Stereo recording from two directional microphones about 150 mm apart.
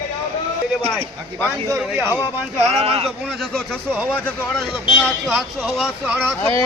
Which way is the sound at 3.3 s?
Centre (ahead or behind).